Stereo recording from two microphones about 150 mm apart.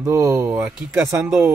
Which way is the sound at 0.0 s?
20° right (ahead or behind).